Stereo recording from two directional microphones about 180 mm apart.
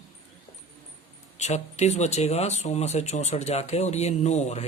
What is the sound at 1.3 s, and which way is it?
Speech, 40° left (ahead or behind).